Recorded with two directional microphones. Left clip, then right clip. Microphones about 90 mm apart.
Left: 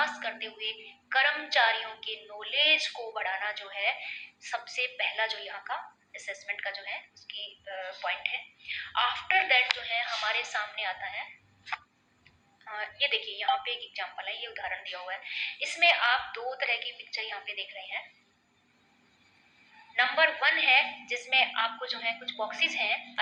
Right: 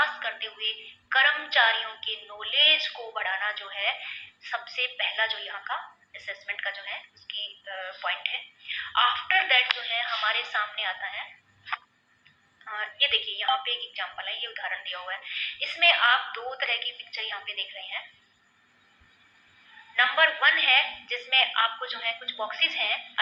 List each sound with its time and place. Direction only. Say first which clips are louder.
0.0 s a woman's voice: right 4 dB; 35° left (ahead or behind)
19.7 s a woman's voice: right 3 dB; 35° left (ahead or behind)